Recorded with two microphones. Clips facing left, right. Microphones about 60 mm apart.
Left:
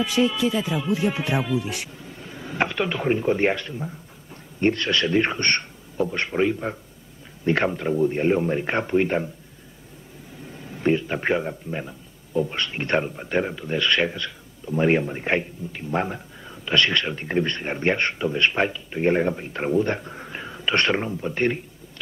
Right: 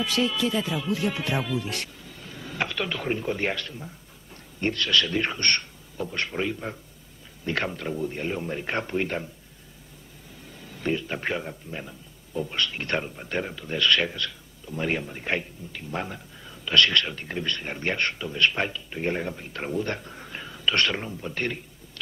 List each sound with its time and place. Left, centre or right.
0.0 s speech: centre
0.7 s a man's voice: centre
10.5 s a man's voice: left